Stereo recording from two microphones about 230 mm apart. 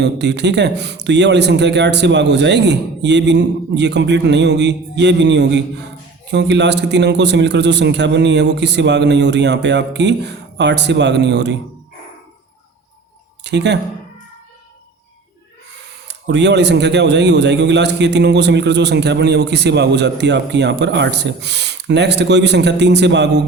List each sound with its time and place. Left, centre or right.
0.0 s a man's voice: right
13.4 s speech: right
16.0 s a man's voice: right